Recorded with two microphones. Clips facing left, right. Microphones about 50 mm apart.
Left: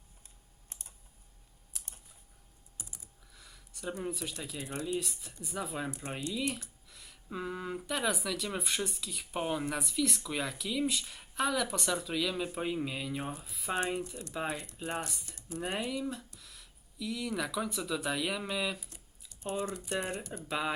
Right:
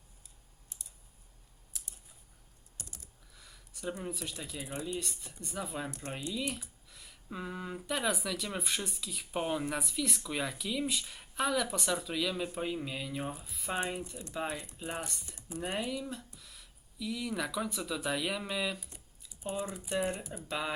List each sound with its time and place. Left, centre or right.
0.7 s computer keyboard: left
2.7 s typing: centre
3.3 s a sound: centre
4.0 s speech: centre
4.9 s speech: centre
6.3 s speech: centre
15.3 s speech: centre
15.5 s speech: centre
20.5 s speech: centre